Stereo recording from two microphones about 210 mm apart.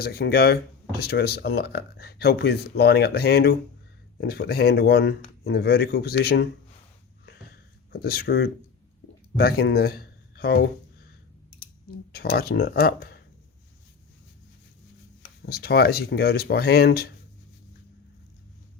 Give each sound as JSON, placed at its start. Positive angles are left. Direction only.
{"t": 0.0, "sound": "speech", "side_deg": 45}
{"t": 7.9, "sound": "speech", "side_deg": 50}
{"t": 12.1, "sound": "speech", "side_deg": 50}
{"t": 15.4, "sound": "speech", "side_deg": 45}